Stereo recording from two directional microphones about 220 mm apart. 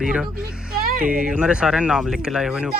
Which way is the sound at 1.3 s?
5° right (ahead or behind).